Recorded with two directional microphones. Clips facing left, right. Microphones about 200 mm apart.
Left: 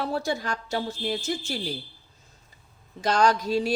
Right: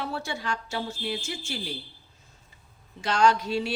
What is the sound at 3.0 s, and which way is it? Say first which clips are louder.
Speech: left 1 dB; 40° left (ahead or behind).